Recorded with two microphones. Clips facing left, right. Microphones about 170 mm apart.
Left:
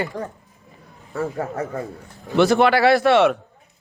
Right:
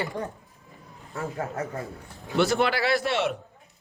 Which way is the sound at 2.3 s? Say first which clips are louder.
Left 7 dB; 75° left (ahead or behind).